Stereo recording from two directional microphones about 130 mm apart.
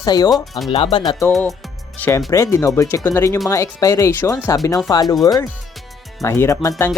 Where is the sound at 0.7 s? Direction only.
45° left (ahead or behind).